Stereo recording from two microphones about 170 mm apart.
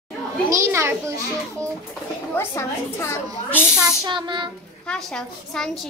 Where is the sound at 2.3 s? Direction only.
15° left (ahead or behind).